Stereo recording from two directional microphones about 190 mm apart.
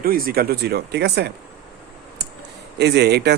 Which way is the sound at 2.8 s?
60° right (ahead or behind).